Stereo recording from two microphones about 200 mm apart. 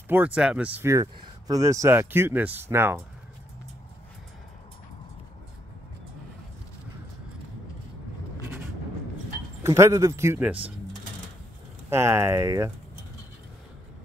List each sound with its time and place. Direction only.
0.1 s speech: 5° right (ahead or behind)
9.6 s speech: 15° right (ahead or behind)
11.9 s speech: 15° right (ahead or behind)